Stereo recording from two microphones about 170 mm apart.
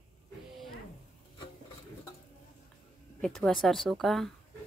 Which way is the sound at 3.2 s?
Centre (ahead or behind).